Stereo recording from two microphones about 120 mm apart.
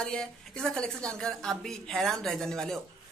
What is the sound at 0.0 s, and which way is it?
Speech, 5° left (ahead or behind).